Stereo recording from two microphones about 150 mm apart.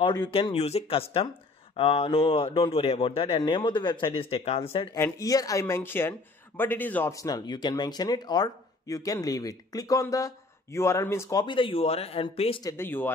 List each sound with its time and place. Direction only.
0.0 s speech: 25° left (ahead or behind)
0.3 s speech: 40° left (ahead or behind)
4.9 s speech: 20° left (ahead or behind); by 12.5 s 40° left (ahead or behind)
12.6 s speech: 15° left (ahead or behind)